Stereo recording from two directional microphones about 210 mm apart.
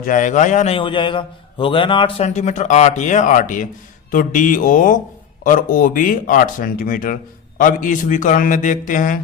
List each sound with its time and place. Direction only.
0.0 s a man's voice: 35° left (ahead or behind)